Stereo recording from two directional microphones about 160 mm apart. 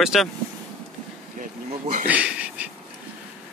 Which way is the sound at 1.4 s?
50° right (ahead or behind).